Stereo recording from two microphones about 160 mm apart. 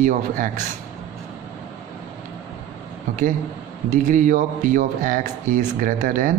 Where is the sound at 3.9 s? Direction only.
55° right (ahead or behind).